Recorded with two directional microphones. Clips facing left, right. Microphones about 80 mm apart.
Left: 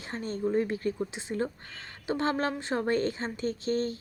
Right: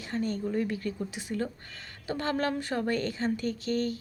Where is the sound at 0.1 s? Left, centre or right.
Left.